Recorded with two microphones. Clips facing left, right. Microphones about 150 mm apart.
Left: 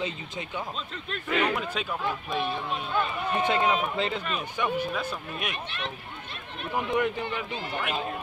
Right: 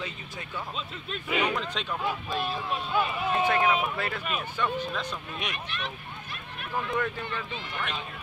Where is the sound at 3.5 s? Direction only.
20° left (ahead or behind); by 5.5 s 5° left (ahead or behind).